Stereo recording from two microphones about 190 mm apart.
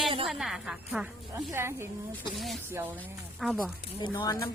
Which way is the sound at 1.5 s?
15° right (ahead or behind).